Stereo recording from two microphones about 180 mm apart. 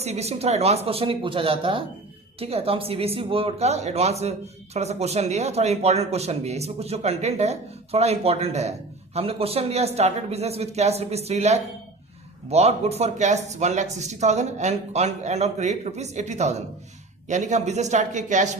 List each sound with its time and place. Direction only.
0.0 s speech: 35° right (ahead or behind)